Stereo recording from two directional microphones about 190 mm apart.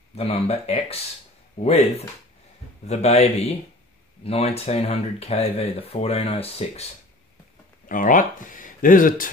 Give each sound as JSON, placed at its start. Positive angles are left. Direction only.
{"t": 0.1, "sound": "speech", "side_deg": 30}
{"t": 7.9, "sound": "speech", "side_deg": 45}